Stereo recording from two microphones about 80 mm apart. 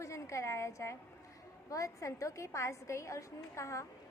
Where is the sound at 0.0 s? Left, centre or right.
Left.